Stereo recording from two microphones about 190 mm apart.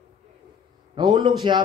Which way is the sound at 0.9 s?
25° right (ahead or behind).